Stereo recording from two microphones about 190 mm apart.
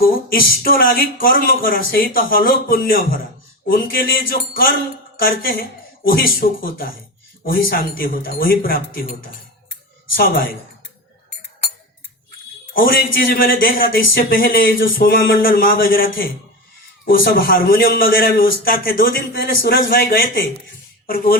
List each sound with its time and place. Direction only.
0.0 s a man's voice: 50° left (ahead or behind)
10.2 s a man's voice: 50° left (ahead or behind)
12.7 s a man's voice: 50° left (ahead or behind)